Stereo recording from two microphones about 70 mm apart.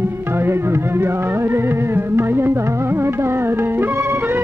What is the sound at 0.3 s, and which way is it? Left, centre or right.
Music, right.